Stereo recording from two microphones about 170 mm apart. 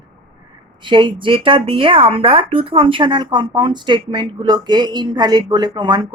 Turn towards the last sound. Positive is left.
turn(degrees=-25)  # may be behind; listen again after turning